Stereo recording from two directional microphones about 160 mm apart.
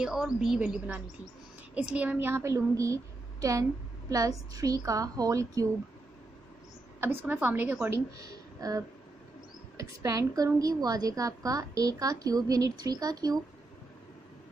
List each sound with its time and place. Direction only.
0.0 s a woman's voice: 5° right (ahead or behind); by 5.7 s 20° right (ahead or behind)
7.0 s a woman's voice: 10° right (ahead or behind)